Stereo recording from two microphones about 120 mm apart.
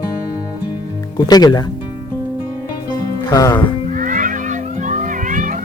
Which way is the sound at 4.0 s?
90° right.